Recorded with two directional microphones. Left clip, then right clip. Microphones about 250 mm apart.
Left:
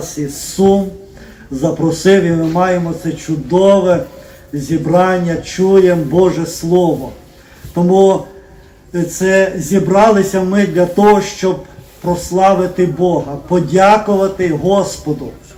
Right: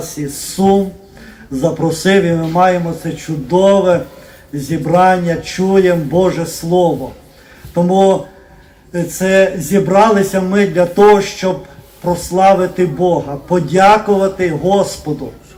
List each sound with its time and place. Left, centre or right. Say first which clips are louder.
0.2 s a man's voice: left 3 dB; right